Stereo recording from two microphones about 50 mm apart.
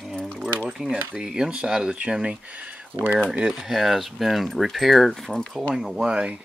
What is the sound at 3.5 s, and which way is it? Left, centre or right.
Speech, centre.